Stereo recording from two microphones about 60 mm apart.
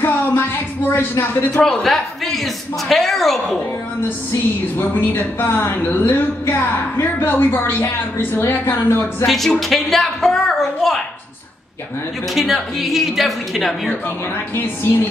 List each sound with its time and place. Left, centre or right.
0.0 s a sound: left
1.5 s speech: centre
4.3 s a woman's voice: left
9.2 s speech: centre
12.4 s speech: centre
14.5 s a woman's voice: left